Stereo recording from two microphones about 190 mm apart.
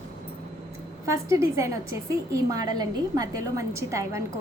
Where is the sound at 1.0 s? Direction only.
15° right (ahead or behind).